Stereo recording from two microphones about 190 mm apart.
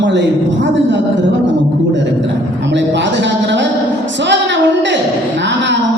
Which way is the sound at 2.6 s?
70° right (ahead or behind).